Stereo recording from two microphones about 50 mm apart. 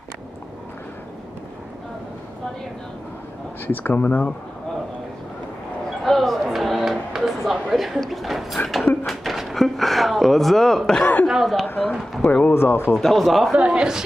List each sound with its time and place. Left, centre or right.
3.6 s speech: left
6.0 s a sound: centre
8.0 s speech: centre
11.6 s speech: left
12.4 s speech: left
12.9 s speech: centre
13.6 s a man's voice: centre